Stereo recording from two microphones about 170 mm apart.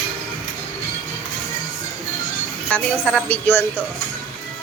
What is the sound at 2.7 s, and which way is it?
Speech, 10° left (ahead or behind).